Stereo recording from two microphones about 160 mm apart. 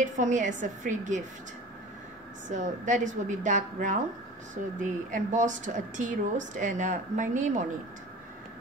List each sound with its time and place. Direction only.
0.0 s speech: 50° right (ahead or behind)
2.4 s speech: 50° right (ahead or behind)